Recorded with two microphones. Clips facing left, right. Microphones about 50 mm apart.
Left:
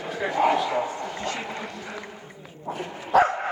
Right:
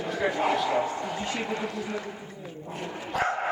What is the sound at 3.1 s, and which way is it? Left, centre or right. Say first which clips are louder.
Bow-wow: left 9 dB; left.